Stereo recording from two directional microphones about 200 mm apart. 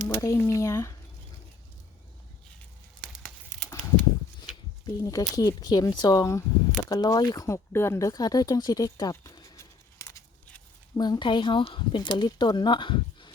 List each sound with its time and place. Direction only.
0.0 s speech: 15° left (ahead or behind)
3.0 s crumpling: centre (ahead or behind)
3.7 s a sound: 15° left (ahead or behind)
4.9 s speech: 15° left (ahead or behind)